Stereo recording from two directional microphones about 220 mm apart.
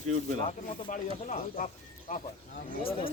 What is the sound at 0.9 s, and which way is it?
Speech, 35° left (ahead or behind).